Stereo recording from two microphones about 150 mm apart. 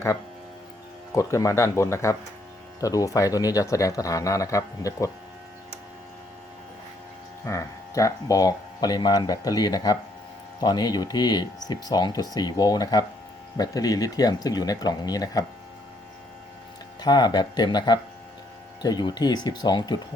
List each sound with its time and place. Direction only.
1.1 s speech: 20° left (ahead or behind)
7.4 s speech: 20° left (ahead or behind)
17.0 s speech: 25° left (ahead or behind)